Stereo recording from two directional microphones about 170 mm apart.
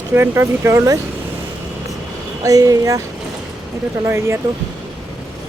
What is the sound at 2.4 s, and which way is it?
Speech, 20° right (ahead or behind).